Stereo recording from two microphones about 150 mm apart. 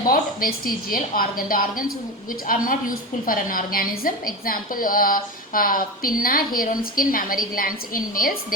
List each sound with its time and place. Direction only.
0.1 s a woman's voice: 70° left (ahead or behind)